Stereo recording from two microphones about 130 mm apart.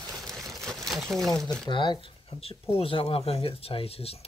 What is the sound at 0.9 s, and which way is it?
Speech, centre (ahead or behind).